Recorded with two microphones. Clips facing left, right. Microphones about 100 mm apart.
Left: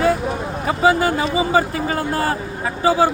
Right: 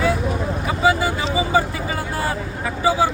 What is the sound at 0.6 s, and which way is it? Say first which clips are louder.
Vehicle: left 3 dB; 40° left (ahead or behind).